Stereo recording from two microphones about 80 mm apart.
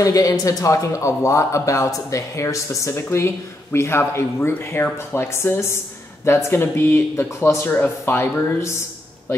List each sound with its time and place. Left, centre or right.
0.0 s speech: left